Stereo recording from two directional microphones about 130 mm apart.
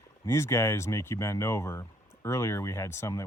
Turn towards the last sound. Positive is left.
turn(degrees=20)  # may be behind; listen again after turning